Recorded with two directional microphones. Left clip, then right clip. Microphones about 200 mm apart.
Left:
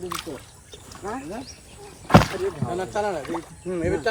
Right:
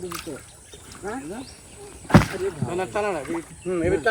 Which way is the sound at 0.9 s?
30° left (ahead or behind).